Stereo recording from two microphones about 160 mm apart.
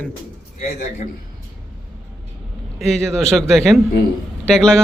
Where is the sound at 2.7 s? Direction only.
Centre (ahead or behind).